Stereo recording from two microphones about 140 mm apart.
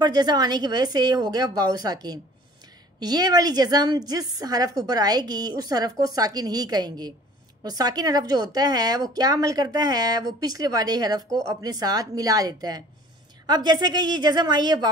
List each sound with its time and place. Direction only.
0.0 s a woman's voice: 30° right (ahead or behind)